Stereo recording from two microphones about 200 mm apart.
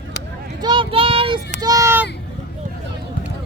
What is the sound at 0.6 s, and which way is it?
Child singing, 25° right (ahead or behind).